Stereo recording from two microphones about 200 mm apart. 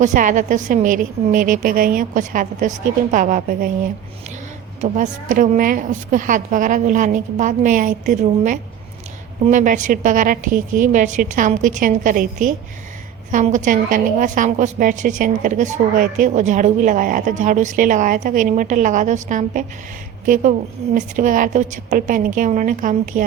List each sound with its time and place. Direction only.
0.0 s a woman's voice: 40° right (ahead or behind)
4.8 s a woman's voice: 40° right (ahead or behind)